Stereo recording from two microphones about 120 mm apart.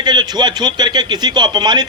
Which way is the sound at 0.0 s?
35° right (ahead or behind).